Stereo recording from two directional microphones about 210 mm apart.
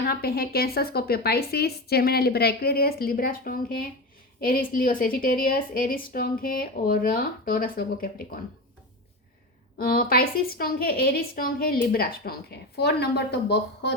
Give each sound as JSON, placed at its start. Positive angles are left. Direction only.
{"t": 0.1, "sound": "a woman's voice", "side_deg": 45}
{"t": 9.7, "sound": "a woman's voice", "side_deg": 45}